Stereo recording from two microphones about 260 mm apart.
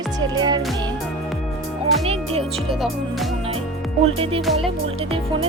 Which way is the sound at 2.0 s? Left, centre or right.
Right.